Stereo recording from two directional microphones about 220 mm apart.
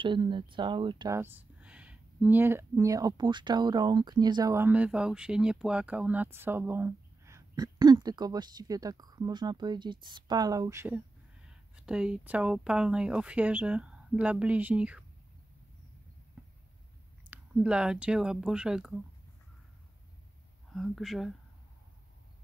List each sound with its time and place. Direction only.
0.0 s speech: 20° right (ahead or behind); by 15.0 s 5° right (ahead or behind)
17.3 s speech: 5° right (ahead or behind)
20.7 s speech: centre (ahead or behind)